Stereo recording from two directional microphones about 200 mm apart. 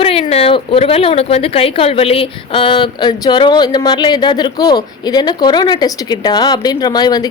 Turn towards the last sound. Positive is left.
turn(degrees=20)  # may be behind; listen again after turning